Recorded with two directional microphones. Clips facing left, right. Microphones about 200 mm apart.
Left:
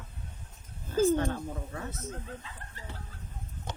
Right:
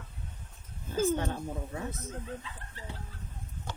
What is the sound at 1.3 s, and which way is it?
Speech, 15° right (ahead or behind).